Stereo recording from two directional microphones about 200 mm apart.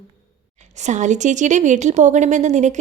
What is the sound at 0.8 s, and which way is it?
Speech, 35° right (ahead or behind).